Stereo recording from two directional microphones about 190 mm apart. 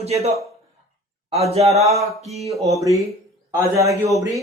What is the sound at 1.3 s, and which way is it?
Speech, 35° right (ahead or behind).